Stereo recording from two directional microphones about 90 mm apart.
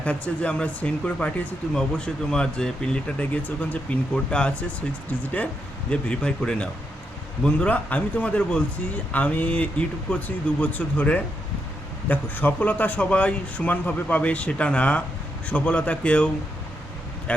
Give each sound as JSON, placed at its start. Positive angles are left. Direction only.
{"t": 0.0, "sound": "speech", "side_deg": 15}